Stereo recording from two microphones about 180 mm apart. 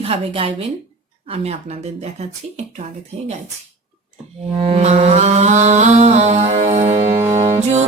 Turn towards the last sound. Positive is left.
turn(degrees=-40)  # may be behind; listen again after turning